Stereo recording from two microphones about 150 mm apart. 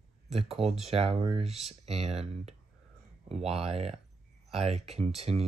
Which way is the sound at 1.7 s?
45° right (ahead or behind).